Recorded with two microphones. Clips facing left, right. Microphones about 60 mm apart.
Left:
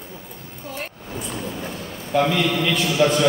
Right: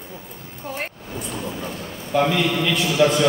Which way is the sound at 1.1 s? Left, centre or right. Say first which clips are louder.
Even; centre.